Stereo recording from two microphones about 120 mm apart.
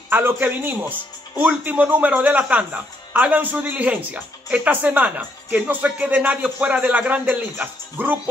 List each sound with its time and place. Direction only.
0.1 s speech: 15° right (ahead or behind)